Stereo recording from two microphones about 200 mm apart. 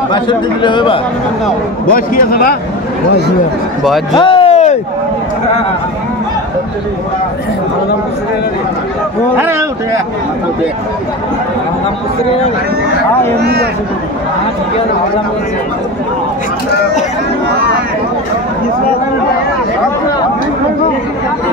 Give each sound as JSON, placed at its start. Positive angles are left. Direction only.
{"t": 0.1, "sound": "speech", "side_deg": 20}
{"t": 1.9, "sound": "a man's voice", "side_deg": 45}
{"t": 4.1, "sound": "a sound", "side_deg": 25}
{"t": 9.4, "sound": "a man's voice", "side_deg": -10}
{"t": 13.4, "sound": "speech", "side_deg": -55}